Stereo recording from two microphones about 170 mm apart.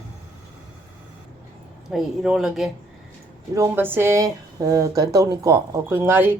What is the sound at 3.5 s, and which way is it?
Speech, 15° right (ahead or behind).